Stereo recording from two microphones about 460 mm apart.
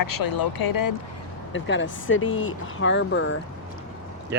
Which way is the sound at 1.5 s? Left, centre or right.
Left.